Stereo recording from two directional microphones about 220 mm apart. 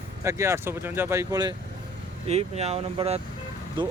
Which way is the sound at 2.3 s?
30° right (ahead or behind).